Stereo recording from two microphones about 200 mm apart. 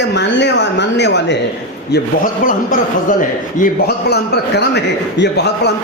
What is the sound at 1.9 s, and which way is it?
A man's voice, 45° left (ahead or behind).